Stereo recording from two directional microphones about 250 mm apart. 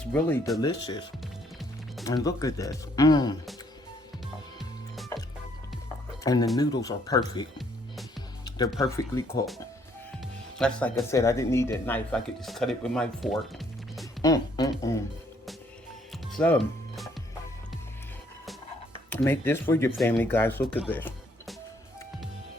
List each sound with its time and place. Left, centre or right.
0.0 s speech: centre
0.6 s speech: centre
2.0 s speech: centre
6.2 s speech: centre
8.4 s music: centre
8.8 s speech: centre
10.6 s speech: centre
14.2 s speech: centre
16.3 s music: centre
19.1 s speech: centre
20.9 s music: centre